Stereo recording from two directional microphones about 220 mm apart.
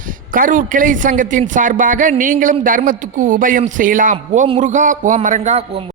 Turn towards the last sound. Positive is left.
turn(degrees=-30)  # may be behind; listen again after turning